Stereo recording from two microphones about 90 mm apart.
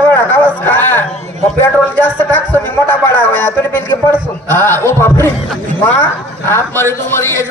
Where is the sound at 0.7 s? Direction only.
20° left (ahead or behind).